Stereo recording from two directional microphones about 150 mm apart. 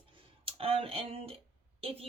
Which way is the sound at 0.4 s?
40° right (ahead or behind).